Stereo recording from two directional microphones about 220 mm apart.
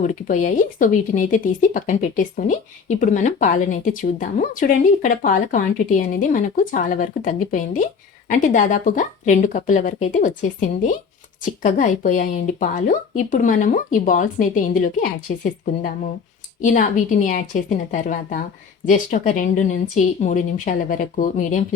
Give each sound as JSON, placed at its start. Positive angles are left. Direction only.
{"t": 0.1, "sound": "speech", "side_deg": 35}